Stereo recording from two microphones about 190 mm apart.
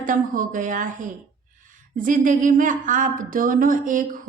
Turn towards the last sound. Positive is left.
turn(degrees=-45)  # may be behind; listen again after turning